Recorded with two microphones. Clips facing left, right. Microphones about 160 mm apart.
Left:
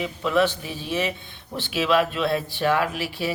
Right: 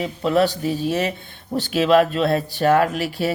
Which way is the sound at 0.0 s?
35° right (ahead or behind).